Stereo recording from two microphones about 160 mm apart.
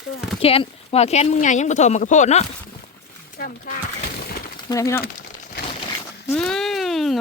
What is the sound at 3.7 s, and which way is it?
Speech, 65° left (ahead or behind).